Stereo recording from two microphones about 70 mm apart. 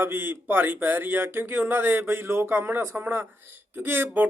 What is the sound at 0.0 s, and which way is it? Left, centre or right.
Speech, right.